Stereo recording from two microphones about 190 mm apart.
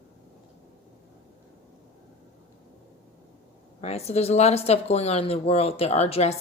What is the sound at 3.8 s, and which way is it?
Speech, 35° left (ahead or behind).